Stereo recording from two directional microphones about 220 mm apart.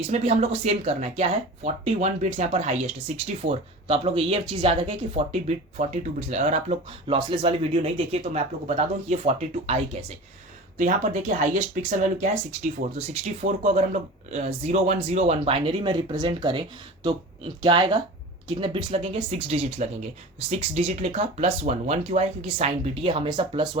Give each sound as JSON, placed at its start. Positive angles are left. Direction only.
{"t": 0.1, "sound": "speech", "side_deg": -30}